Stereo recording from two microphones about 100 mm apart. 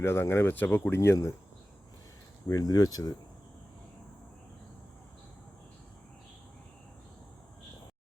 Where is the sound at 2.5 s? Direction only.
40° left (ahead or behind).